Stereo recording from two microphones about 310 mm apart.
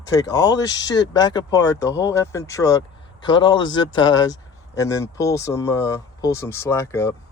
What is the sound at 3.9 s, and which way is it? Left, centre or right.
Speech, left.